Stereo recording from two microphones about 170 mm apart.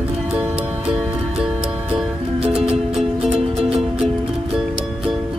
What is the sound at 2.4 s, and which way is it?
Music, 35° right (ahead or behind).